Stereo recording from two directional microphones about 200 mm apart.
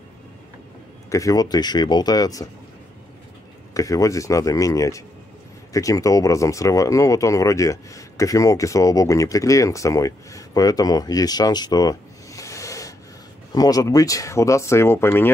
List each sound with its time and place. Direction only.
1.1 s speech: 15° left (ahead or behind)
3.7 s speech: 15° left (ahead or behind)